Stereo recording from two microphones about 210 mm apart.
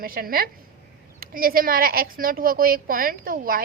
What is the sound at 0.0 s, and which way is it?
A woman's voice, 45° right (ahead or behind).